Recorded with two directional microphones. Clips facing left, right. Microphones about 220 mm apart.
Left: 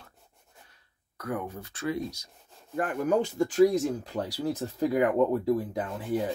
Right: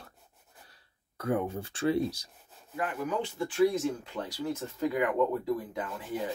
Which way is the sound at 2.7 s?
50° left (ahead or behind).